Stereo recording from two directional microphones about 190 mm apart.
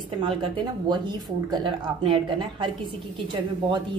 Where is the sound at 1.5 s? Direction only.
25° right (ahead or behind).